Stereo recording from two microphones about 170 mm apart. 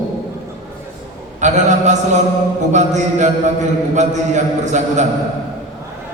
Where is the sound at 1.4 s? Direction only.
45° right (ahead or behind).